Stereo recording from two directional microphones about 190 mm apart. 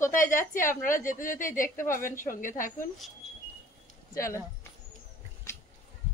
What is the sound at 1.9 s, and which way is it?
Speech, 10° left (ahead or behind).